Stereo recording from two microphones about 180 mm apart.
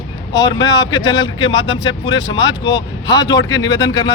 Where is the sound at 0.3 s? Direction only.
25° left (ahead or behind).